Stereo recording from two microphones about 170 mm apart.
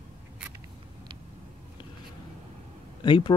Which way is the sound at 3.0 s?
30° left (ahead or behind).